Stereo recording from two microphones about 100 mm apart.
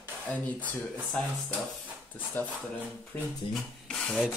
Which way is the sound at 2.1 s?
15° left (ahead or behind).